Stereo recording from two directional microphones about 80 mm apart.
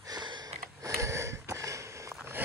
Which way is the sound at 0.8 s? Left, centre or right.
Right.